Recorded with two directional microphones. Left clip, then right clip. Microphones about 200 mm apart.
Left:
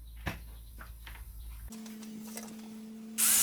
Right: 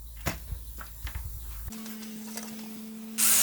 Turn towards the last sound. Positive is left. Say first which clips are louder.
# right 4 dB
turn(degrees=0)  # may be behind; listen again after turning